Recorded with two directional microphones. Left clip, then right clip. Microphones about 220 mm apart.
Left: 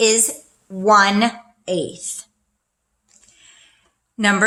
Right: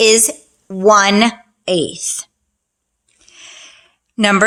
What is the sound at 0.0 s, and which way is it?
A woman's voice, 50° right (ahead or behind).